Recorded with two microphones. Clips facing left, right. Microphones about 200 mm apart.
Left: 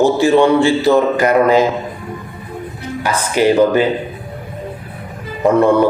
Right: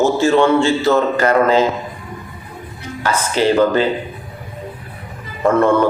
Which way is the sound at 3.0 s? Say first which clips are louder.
Left 2 dB; 15° left (ahead or behind).